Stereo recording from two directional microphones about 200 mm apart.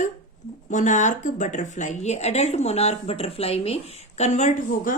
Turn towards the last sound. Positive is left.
turn(degrees=35)  # may be behind; listen again after turning